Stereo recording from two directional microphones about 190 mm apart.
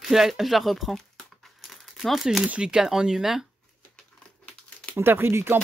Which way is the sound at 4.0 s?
5° left (ahead or behind).